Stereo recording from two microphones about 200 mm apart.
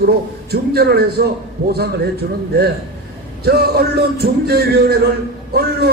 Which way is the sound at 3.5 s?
50° right (ahead or behind).